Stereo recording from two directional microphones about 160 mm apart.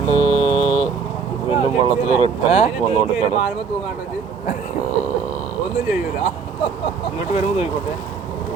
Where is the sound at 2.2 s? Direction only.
40° left (ahead or behind).